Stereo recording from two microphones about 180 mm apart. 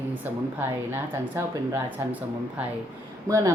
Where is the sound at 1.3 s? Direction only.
10° right (ahead or behind).